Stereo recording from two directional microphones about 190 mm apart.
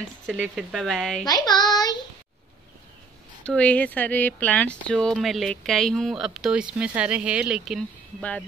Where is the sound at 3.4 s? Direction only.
5° left (ahead or behind).